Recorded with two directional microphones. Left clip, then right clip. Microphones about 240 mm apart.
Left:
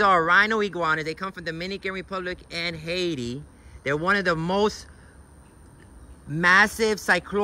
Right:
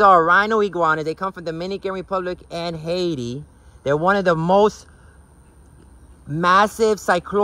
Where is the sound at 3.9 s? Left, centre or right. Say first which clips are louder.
Right 5 dB; centre.